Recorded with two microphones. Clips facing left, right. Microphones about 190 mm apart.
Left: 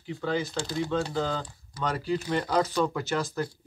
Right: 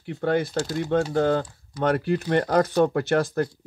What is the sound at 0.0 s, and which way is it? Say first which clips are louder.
Speech: right 6 dB; 60° right (ahead or behind).